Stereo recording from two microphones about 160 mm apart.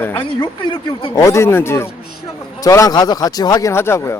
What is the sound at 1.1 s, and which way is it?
A man's voice, 20° left (ahead or behind).